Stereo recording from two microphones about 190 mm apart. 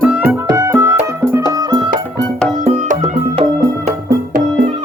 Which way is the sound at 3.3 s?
30° right (ahead or behind).